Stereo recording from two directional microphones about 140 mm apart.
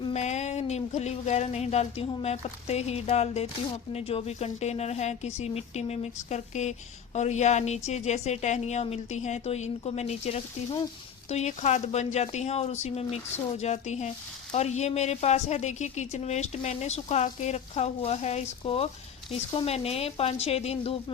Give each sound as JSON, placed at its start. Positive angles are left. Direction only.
{"t": 0.1, "sound": "a woman's voice", "side_deg": 55}